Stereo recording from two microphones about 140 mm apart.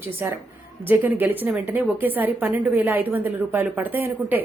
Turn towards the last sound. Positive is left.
turn(degrees=-15)  # may be behind; listen again after turning